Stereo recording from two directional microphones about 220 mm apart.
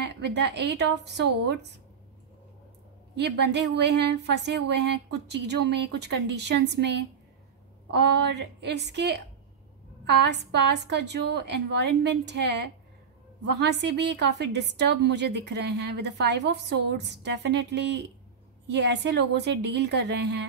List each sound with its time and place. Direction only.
0.0 s a woman's voice: 50° right (ahead or behind)
3.2 s a woman's voice: 50° right (ahead or behind)
13.6 s a woman's voice: 50° right (ahead or behind)